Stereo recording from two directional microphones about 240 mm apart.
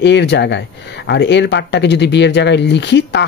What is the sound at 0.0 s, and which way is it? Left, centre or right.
Speech, left.